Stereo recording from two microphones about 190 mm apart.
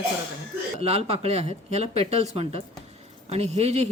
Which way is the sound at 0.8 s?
35° right (ahead or behind).